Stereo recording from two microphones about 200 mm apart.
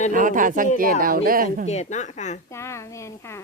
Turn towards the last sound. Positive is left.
turn(degrees=15)  # may be behind; listen again after turning